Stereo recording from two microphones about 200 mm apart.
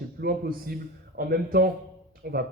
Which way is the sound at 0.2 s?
50° right (ahead or behind).